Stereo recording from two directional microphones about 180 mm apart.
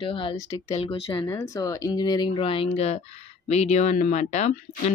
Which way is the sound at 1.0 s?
15° left (ahead or behind).